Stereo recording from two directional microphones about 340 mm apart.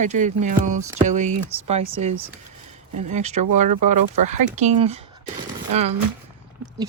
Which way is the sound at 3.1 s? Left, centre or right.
Centre.